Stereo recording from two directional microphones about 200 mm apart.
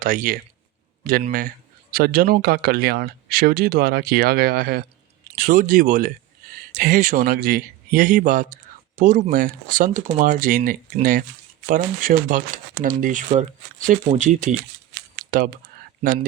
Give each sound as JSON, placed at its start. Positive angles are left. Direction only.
{"t": 0.0, "sound": "speech", "side_deg": -40}
{"t": 15.2, "sound": "typing", "side_deg": -45}